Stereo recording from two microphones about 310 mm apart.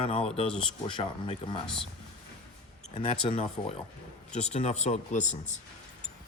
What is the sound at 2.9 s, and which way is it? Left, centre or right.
Speech, centre.